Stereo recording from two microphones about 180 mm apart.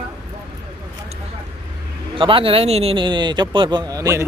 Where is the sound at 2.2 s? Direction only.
30° right (ahead or behind).